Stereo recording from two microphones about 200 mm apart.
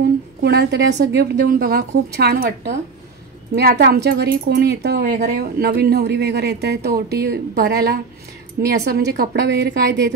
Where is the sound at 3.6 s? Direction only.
50° right (ahead or behind).